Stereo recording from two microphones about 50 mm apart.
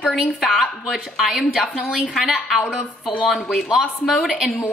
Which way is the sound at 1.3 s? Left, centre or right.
Centre.